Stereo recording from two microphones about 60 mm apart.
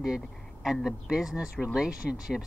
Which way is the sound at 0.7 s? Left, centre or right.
Centre.